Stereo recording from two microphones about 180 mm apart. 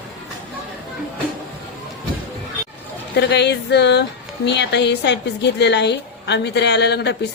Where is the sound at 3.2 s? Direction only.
70° left (ahead or behind).